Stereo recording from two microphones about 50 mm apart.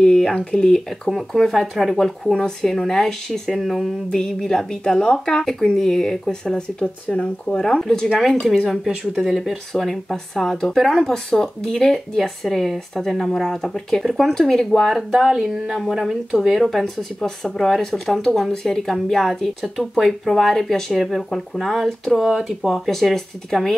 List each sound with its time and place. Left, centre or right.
0.0 s speech: centre
1.1 s speech: centre
4.1 s speech: centre
9.1 s speech: centre
9.8 s speech: centre
15.0 s speech: centre
22.1 s speech: centre
22.8 s speech: centre